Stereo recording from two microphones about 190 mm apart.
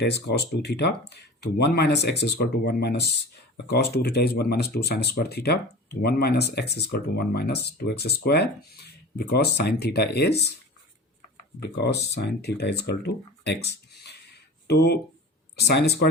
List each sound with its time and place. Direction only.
0.0 s speech: 60° left (ahead or behind)
11.7 s speech: 60° left (ahead or behind)